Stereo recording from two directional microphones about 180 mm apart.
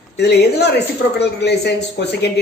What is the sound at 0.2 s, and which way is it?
A woman's voice, 65° left (ahead or behind).